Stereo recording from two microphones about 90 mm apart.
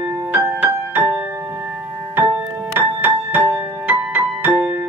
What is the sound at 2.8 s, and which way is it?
Music, 15° right (ahead or behind).